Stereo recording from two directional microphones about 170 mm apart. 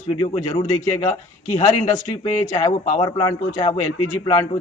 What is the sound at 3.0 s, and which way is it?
Speech, 30° left (ahead or behind).